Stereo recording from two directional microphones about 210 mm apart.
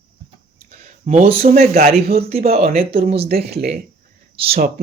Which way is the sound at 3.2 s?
50° right (ahead or behind).